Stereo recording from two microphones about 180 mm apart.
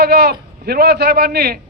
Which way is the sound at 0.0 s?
60° right (ahead or behind).